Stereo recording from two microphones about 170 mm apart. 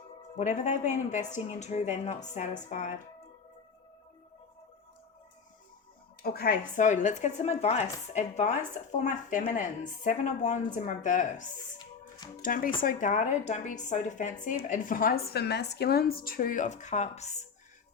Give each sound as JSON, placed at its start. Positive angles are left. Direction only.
{"t": 0.3, "sound": "speech", "side_deg": 45}
{"t": 6.2, "sound": "speech", "side_deg": 65}